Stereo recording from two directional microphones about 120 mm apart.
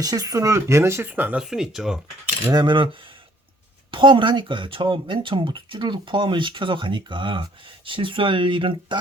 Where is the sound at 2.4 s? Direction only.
35° right (ahead or behind).